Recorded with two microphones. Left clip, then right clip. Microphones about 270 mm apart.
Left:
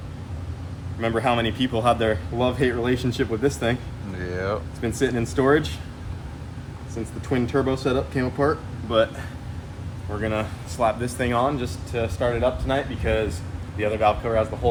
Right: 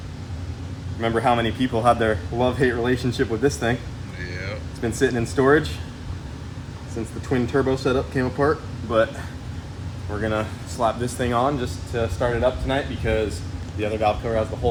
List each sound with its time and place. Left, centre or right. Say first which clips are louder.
1.0 s speech: right 2 dB; centre
4.2 s vehicle: left 4 dB; left
4.8 s speech: right 5 dB; centre
7.3 s speech: right 1 dB; centre
10.1 s speech: right 1 dB; centre